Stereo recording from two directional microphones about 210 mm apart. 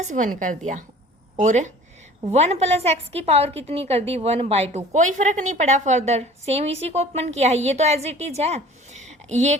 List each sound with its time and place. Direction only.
0.0 s a woman's voice: 35° right (ahead or behind)